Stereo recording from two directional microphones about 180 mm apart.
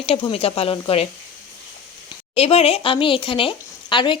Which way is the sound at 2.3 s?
35° left (ahead or behind).